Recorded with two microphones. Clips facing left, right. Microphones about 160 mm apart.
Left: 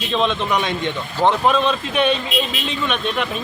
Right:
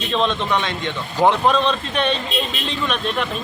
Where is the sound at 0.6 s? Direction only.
15° left (ahead or behind).